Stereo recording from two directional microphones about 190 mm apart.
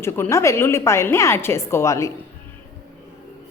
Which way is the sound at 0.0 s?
15° left (ahead or behind).